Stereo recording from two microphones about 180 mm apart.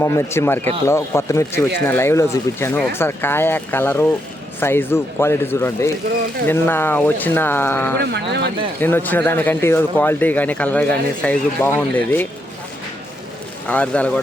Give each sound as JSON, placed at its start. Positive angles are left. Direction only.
{"t": 0.0, "sound": "speech", "side_deg": 15}
{"t": 8.0, "sound": "speech", "side_deg": -70}
{"t": 8.8, "sound": "speech", "side_deg": 10}
{"t": 13.7, "sound": "speech", "side_deg": 5}